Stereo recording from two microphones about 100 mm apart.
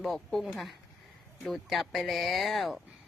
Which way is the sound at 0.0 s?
5° left (ahead or behind).